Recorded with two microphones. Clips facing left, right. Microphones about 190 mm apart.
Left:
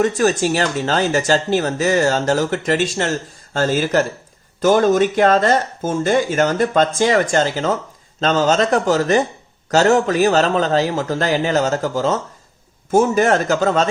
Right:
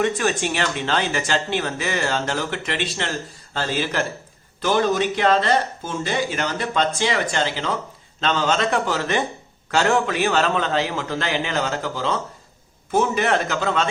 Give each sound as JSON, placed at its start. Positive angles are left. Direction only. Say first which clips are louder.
{"t": 0.0, "sound": "speech", "louder": "left 5 dB", "side_deg": 40}